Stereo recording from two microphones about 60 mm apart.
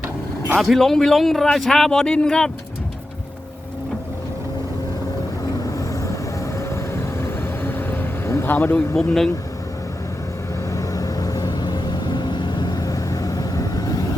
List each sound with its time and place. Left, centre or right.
0.6 s a man's voice: centre
5.7 s vehicle: left
8.4 s speech: left
9.0 s a man's voice: centre
10.7 s vehicle: left